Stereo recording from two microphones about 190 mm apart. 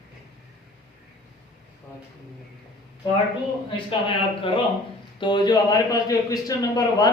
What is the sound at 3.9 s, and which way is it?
A man's voice, 25° left (ahead or behind).